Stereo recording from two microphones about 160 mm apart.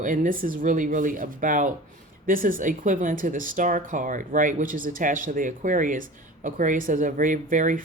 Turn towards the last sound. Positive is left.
turn(degrees=-55)  # may be behind; listen again after turning